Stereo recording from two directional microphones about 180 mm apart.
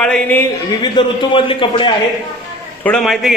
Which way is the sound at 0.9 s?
30° left (ahead or behind).